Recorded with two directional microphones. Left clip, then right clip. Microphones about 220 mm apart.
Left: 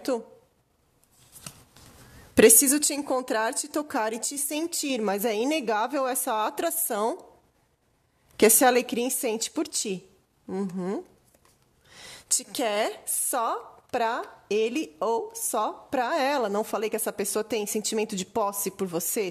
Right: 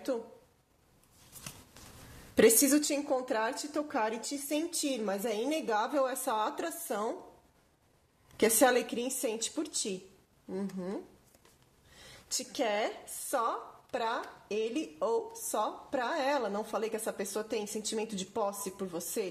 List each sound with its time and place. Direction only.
2.3 s a woman's voice: 45° left (ahead or behind)
8.4 s a woman's voice: 45° left (ahead or behind)
12.3 s a woman's voice: 45° left (ahead or behind)